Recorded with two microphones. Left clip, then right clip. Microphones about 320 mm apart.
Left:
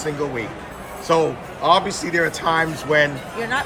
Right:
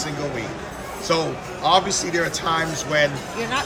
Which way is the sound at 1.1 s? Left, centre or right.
Centre.